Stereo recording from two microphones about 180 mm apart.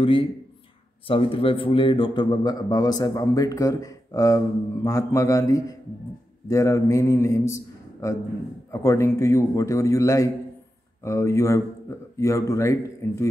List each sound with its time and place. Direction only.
0.0 s a man's voice: 30° left (ahead or behind)